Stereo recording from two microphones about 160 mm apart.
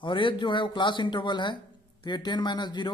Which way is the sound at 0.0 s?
30° left (ahead or behind).